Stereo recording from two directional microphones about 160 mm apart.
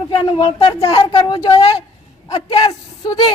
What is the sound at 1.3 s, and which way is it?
A woman's voice, 35° left (ahead or behind).